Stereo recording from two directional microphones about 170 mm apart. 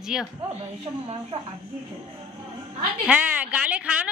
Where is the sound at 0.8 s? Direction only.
30° right (ahead or behind).